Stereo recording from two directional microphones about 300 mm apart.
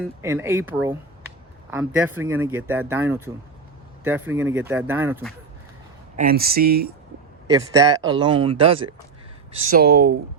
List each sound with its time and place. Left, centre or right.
0.0 s speech: centre
2.0 s speech: centre
2.2 s speech: right
2.6 s speech: centre
6.1 s speech: right
7.5 s speech: centre; by 10.2 s right